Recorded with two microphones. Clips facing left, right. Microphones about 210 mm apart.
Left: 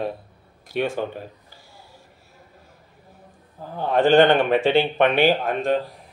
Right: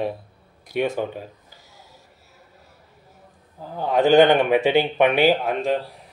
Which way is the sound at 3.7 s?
10° right (ahead or behind).